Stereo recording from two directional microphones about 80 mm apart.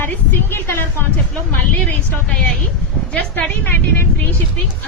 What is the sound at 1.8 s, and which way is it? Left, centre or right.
A woman's voice, centre.